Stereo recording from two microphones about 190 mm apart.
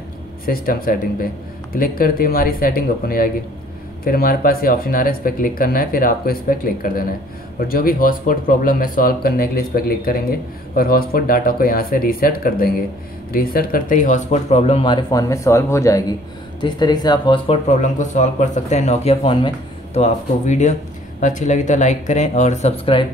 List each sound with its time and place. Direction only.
0.5 s speech: 50° left (ahead or behind); by 17.6 s 25° left (ahead or behind)
17.6 s speech: 40° left (ahead or behind)